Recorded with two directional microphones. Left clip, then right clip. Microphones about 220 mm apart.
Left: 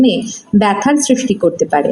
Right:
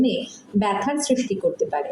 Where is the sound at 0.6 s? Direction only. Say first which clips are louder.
Left 9 dB; 50° left (ahead or behind).